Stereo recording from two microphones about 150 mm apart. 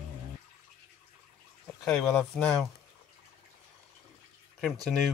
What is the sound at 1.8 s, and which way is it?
Speech, 5° left (ahead or behind).